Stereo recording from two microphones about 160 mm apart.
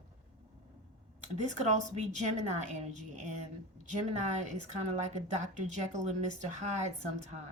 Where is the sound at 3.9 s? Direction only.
45° right (ahead or behind).